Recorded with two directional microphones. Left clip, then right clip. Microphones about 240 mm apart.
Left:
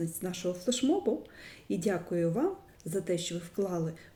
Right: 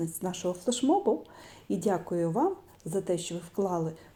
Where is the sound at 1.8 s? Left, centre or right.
Right.